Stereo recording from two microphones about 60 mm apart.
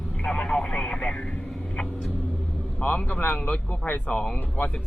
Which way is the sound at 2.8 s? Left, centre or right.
Left.